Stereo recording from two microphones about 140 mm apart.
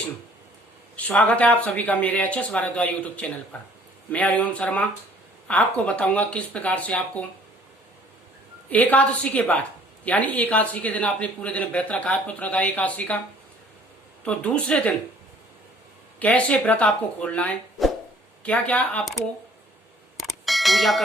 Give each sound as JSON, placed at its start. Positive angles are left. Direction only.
{"t": 0.9, "sound": "speech", "side_deg": 10}
{"t": 8.7, "sound": "speech", "side_deg": 10}
{"t": 14.3, "sound": "speech", "side_deg": 10}
{"t": 16.2, "sound": "speech", "side_deg": 10}
{"t": 20.1, "sound": "bell", "side_deg": 0}